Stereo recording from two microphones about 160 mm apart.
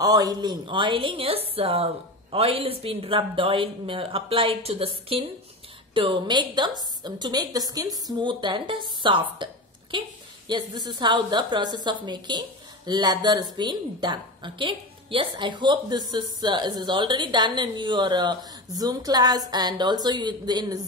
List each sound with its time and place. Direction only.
0.0 s a woman's voice: 25° right (ahead or behind)
9.4 s a sound: 30° right (ahead or behind)
10.5 s a woman's voice: 25° right (ahead or behind)